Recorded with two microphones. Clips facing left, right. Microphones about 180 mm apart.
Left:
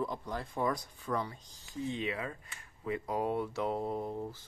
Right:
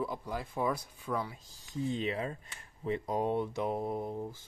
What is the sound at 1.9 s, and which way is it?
Speech, 30° right (ahead or behind).